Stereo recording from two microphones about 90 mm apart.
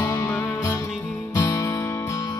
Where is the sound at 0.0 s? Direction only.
35° left (ahead or behind).